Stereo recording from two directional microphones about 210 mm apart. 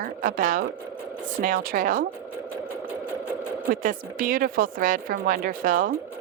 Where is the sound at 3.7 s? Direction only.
40° right (ahead or behind).